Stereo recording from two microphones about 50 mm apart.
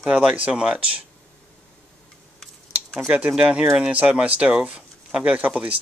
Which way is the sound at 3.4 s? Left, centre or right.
Centre.